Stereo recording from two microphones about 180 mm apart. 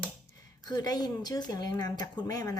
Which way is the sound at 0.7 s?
20° left (ahead or behind).